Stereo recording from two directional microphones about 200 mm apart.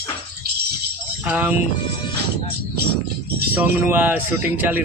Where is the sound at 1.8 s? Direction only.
25° left (ahead or behind).